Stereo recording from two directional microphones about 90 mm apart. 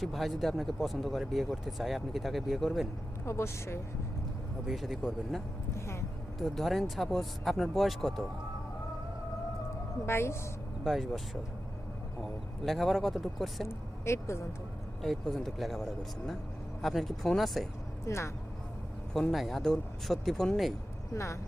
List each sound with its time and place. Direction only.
0.0 s speech: centre (ahead or behind)
3.2 s a woman's voice: 30° left (ahead or behind)
4.6 s speech: centre (ahead or behind)
5.7 s a sound: 30° left (ahead or behind)
6.4 s speech: centre (ahead or behind)
10.1 s a woman's voice: 25° left (ahead or behind)
10.8 s speech: 5° right (ahead or behind)
12.2 s speech: centre (ahead or behind)
13.7 s speech: 30° left (ahead or behind)
15.0 s speech: centre (ahead or behind)
18.0 s speech: 30° left (ahead or behind)
19.3 s speech: centre (ahead or behind)
21.1 s speech: 35° left (ahead or behind)